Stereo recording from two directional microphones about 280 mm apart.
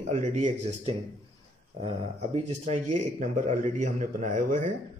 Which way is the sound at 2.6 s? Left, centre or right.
Right.